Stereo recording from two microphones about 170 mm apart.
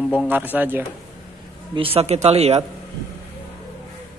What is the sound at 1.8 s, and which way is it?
Speech, 35° right (ahead or behind).